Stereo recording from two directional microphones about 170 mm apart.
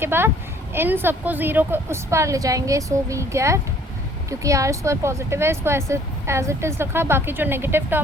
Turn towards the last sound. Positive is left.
turn(degrees=-15)  # may be behind; listen again after turning